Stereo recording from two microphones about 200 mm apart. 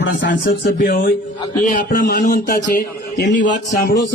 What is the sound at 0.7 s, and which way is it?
A man's voice, 45° left (ahead or behind).